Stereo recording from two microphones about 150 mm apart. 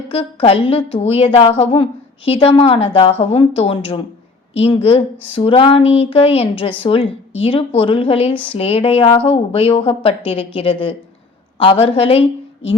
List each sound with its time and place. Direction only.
0.1 s speech: 35° left (ahead or behind)